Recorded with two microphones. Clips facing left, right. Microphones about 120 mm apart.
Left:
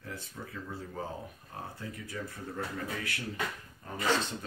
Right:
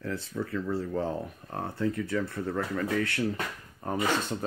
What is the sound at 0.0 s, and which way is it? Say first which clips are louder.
Speech: right 10 dB; 75° right (ahead or behind).